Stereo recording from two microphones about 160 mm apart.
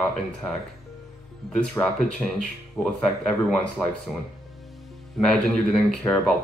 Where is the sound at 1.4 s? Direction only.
Centre (ahead or behind).